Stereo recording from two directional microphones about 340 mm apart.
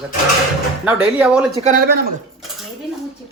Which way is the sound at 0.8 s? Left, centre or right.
Centre.